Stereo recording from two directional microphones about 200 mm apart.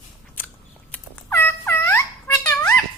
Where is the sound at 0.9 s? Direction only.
10° left (ahead or behind).